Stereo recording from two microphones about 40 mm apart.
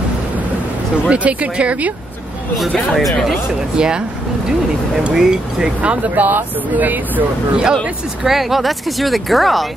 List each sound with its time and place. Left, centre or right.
1.0 s speech: right
3.0 s speech: centre
3.7 s speech: right
5.1 s speech: centre
5.8 s speech: right
6.2 s speech: right
7.5 s speech: right
8.3 s speech: centre